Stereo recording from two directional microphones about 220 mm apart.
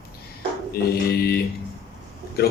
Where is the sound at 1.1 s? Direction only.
45° left (ahead or behind).